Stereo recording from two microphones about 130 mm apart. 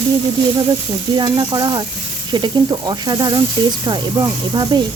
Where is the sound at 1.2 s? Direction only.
30° right (ahead or behind).